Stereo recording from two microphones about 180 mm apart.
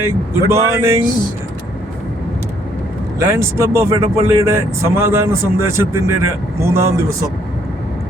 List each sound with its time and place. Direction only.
0.0 s speech: 15° right (ahead or behind)
3.2 s speech: 15° right (ahead or behind)